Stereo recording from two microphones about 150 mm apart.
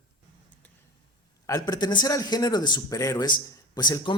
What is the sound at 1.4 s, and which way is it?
Speech, 25° left (ahead or behind).